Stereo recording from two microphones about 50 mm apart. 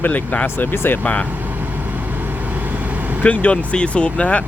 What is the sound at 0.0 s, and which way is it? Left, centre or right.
Speech, left.